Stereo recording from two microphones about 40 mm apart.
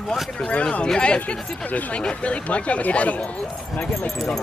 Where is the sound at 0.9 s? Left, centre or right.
Left.